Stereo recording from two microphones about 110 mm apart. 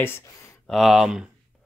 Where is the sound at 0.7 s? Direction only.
Centre (ahead or behind).